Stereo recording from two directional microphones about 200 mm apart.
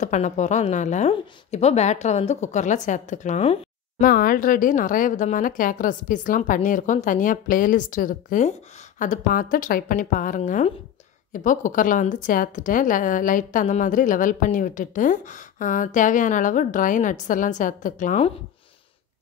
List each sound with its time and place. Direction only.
0.0 s a woman's voice: 35° left (ahead or behind)